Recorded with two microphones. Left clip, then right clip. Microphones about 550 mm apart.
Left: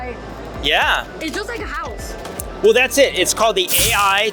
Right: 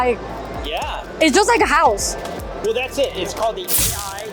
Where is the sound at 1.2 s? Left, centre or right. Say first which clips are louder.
Right 11 dB; right.